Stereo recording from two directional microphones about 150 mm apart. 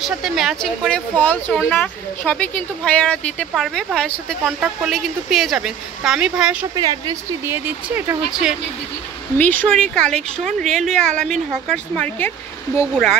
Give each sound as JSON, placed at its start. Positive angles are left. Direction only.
{"t": 0.0, "sound": "speech", "side_deg": 0}
{"t": 6.7, "sound": "speech", "side_deg": -25}
{"t": 9.4, "sound": "speech", "side_deg": 10}